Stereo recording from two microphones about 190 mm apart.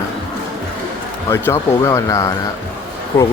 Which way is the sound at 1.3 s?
15° left (ahead or behind).